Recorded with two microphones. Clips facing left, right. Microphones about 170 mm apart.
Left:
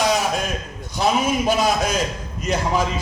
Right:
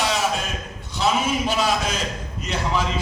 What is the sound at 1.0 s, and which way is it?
A man's voice, 45° left (ahead or behind).